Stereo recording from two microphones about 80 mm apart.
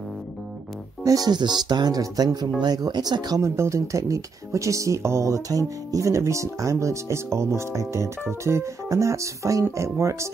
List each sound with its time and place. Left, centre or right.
1.0 s speech: right
3.3 s speech: right